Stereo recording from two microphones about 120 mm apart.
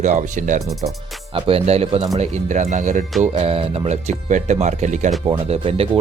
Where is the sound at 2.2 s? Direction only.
90° right.